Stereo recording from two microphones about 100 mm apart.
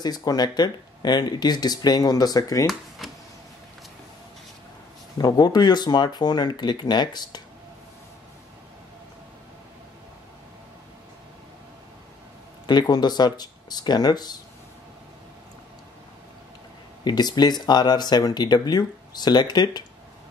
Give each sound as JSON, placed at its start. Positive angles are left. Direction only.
{"t": 0.0, "sound": "speech", "side_deg": 40}
{"t": 3.0, "sound": "power windows", "side_deg": -5}
{"t": 5.1, "sound": "speech", "side_deg": 45}
{"t": 12.6, "sound": "speech", "side_deg": 45}
{"t": 17.0, "sound": "speech", "side_deg": 45}